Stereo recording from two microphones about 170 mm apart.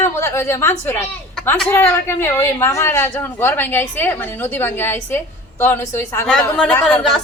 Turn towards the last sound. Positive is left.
turn(degrees=5)  # may be behind; listen again after turning